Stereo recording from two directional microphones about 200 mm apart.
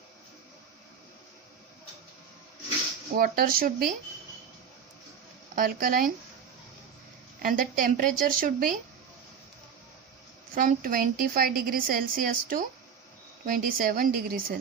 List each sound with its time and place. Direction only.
3.2 s a woman's voice: 45° right (ahead or behind)
5.5 s a woman's voice: 45° right (ahead or behind)
7.4 s a woman's voice: 45° right (ahead or behind)
10.5 s a woman's voice: 45° right (ahead or behind)